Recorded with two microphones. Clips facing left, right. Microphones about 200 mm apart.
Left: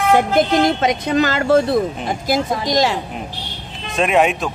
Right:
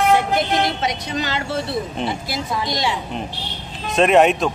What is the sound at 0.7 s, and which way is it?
Speech, 50° left (ahead or behind).